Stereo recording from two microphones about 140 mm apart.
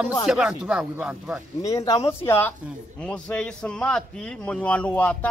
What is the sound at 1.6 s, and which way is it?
A man's voice, 25° left (ahead or behind).